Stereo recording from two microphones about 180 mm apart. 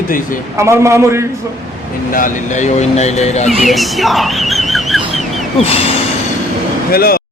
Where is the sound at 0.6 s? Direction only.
15° right (ahead or behind).